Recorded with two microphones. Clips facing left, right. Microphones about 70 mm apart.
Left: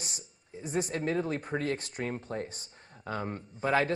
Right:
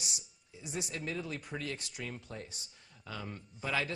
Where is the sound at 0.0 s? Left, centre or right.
Left.